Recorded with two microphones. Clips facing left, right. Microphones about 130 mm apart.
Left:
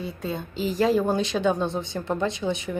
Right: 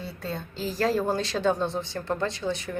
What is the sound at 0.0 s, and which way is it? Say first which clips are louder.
Speech: left 4 dB; 15° left (ahead or behind).